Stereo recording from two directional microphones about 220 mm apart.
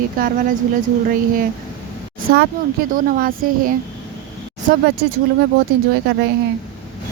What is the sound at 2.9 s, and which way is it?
Speech, 40° right (ahead or behind).